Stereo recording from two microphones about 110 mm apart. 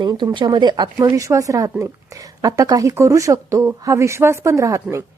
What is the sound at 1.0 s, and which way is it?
A woman's voice, 30° right (ahead or behind).